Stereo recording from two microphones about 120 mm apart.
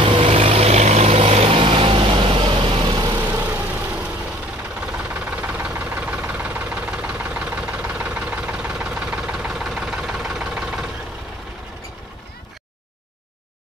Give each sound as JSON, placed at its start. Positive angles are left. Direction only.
{"t": 0.0, "sound": "vehicle", "side_deg": -50}
{"t": 0.5, "sound": "vehicle", "side_deg": -60}
{"t": 3.3, "sound": "vehicle", "side_deg": -15}
{"t": 5.4, "sound": "engine knocking", "side_deg": -10}